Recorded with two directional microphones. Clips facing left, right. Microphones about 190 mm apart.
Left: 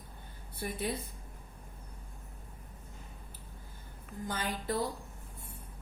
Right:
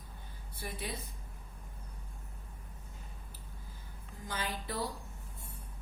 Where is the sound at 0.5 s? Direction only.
55° left (ahead or behind).